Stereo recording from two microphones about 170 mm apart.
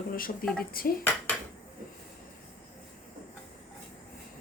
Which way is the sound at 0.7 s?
60° left (ahead or behind).